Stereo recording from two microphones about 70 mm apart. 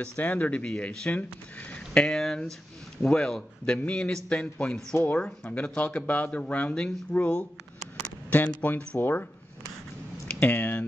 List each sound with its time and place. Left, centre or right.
0.0 s speech: left
2.0 s a man's voice: centre
8.5 s speech: left